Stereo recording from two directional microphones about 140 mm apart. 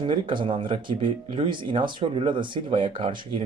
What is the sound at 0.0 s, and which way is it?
Speech, 35° right (ahead or behind).